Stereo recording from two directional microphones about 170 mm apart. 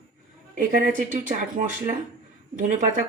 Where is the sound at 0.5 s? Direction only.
55° right (ahead or behind).